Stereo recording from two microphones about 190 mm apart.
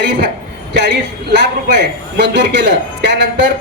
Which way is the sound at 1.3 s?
60° right (ahead or behind).